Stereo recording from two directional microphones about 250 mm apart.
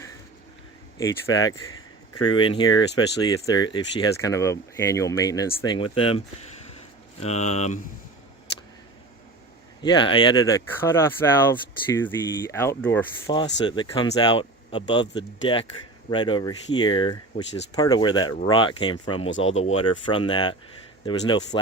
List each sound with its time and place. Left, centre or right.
0.9 s speech: centre
9.8 s speech: centre